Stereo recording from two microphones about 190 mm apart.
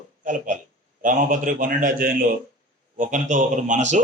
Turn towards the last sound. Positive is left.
turn(degrees=-40)  # may be behind; listen again after turning